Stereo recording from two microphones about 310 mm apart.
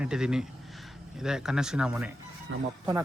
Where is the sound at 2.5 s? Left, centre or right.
Right.